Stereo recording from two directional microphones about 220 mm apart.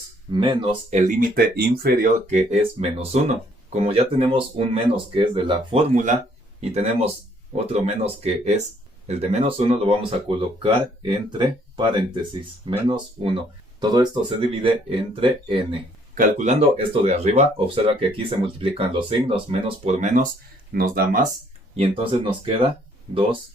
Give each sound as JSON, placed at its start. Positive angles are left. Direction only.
{"t": 0.3, "sound": "speech", "side_deg": -20}
{"t": 0.9, "sound": "speech", "side_deg": -35}
{"t": 2.3, "sound": "speech", "side_deg": -25}
{"t": 13.7, "sound": "speech", "side_deg": -20}
{"t": 21.8, "sound": "speech", "side_deg": -25}